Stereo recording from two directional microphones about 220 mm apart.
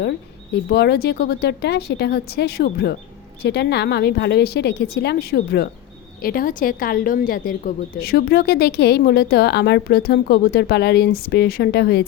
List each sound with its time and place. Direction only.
0.7 s a woman's voice: 50° left (ahead or behind)